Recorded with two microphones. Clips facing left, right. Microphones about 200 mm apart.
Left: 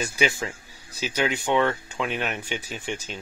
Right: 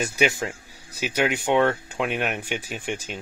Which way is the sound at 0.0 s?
50° right (ahead or behind).